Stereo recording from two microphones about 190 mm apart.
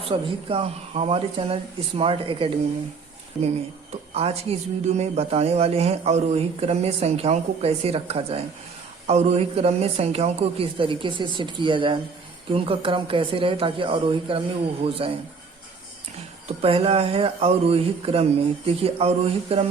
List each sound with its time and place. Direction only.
0.0 s a woman's voice: 30° right (ahead or behind)
4.1 s a man's voice: 30° right (ahead or behind)
16.5 s a man's voice: 30° right (ahead or behind)